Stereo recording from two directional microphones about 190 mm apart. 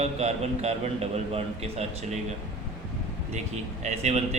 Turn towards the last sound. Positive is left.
turn(degrees=-35)  # may be behind; listen again after turning